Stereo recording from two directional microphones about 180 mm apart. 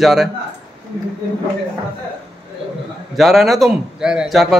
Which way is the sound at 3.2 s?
Centre (ahead or behind).